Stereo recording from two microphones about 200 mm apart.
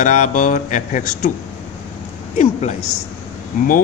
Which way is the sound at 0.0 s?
40° left (ahead or behind).